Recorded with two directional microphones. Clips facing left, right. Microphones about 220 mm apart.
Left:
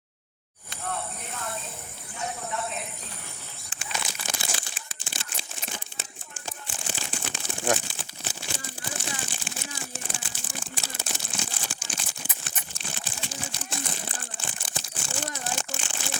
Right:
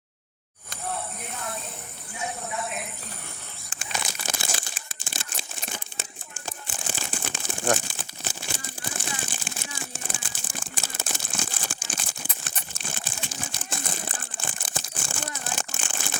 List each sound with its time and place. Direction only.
3.7 s crumpling: 40° right (ahead or behind)